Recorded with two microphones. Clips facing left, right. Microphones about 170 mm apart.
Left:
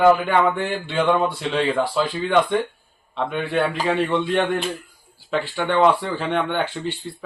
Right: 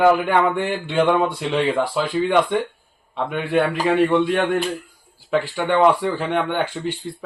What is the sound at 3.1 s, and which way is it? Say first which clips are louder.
Speech: right 2 dB; 10° right (ahead or behind).